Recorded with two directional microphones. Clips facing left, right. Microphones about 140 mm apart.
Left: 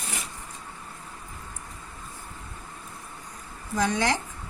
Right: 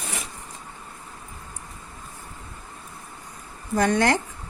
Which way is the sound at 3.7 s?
55° right (ahead or behind).